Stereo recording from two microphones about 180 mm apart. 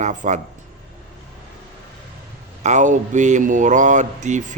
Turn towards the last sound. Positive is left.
turn(degrees=-40)  # may be behind; listen again after turning